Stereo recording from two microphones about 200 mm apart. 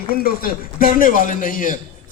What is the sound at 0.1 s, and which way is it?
A man's voice, 45° left (ahead or behind).